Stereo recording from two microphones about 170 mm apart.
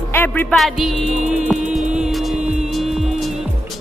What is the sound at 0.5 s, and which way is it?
Speech, centre (ahead or behind).